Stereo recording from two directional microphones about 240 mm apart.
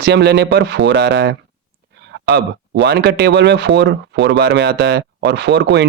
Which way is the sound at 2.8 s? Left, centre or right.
Right.